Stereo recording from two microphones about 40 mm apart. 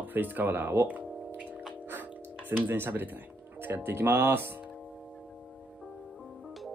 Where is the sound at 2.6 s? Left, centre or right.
Right.